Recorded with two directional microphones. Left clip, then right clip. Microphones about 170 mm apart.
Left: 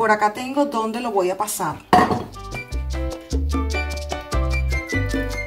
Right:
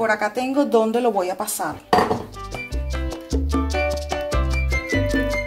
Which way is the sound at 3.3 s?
Centre (ahead or behind).